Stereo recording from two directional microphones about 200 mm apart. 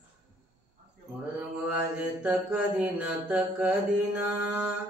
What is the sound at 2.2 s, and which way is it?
Mantra, 5° right (ahead or behind).